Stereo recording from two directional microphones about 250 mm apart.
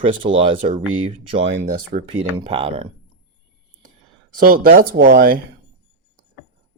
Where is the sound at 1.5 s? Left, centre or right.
Right.